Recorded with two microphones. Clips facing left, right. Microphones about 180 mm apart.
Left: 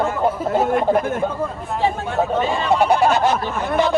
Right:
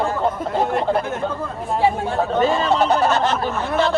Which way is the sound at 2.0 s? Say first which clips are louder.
Right 1 dB; 40° right (ahead or behind).